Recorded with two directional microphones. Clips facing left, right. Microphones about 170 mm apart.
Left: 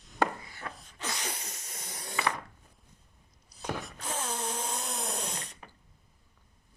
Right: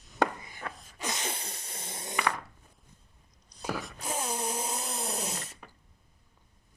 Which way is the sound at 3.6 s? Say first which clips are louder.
Right 1 dB; 5° right (ahead or behind).